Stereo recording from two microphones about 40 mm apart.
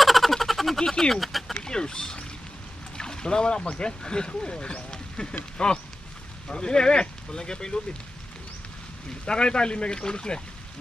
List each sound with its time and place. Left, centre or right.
0.0 s a sound: centre
1.6 s speech: centre
3.0 s boat: centre
3.7 s speech: left
9.2 s speech: left